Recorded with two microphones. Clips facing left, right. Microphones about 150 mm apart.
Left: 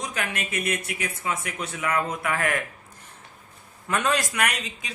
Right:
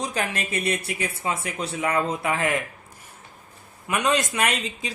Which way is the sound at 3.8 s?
15° right (ahead or behind).